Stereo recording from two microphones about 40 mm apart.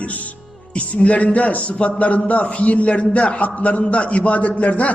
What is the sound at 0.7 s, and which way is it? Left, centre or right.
A man's voice, left.